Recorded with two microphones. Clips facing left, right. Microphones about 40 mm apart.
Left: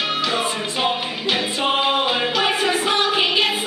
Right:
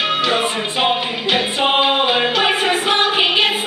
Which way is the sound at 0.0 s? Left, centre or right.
Right.